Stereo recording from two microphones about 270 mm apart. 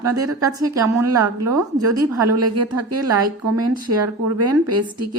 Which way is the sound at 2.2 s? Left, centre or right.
Right.